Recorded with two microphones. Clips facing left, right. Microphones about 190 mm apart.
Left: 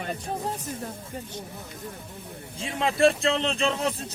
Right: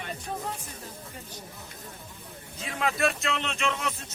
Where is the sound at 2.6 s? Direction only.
30° left (ahead or behind).